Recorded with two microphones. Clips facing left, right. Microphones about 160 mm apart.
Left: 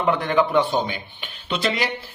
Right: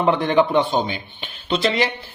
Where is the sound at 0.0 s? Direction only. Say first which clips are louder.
Right 3 dB; 25° right (ahead or behind).